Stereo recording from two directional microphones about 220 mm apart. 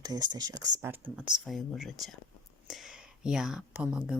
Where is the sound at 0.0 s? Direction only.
20° right (ahead or behind).